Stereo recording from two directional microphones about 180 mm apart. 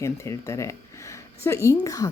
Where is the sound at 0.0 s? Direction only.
15° left (ahead or behind).